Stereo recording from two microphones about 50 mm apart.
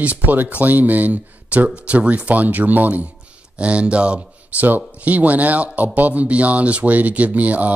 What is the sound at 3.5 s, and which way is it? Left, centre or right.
Speech, right.